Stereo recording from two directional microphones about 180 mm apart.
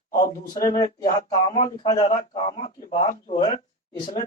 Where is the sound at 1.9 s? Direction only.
30° left (ahead or behind).